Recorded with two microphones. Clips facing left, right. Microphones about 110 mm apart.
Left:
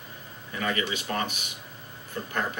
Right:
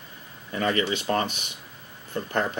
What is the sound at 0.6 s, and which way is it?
Speech, 40° right (ahead or behind).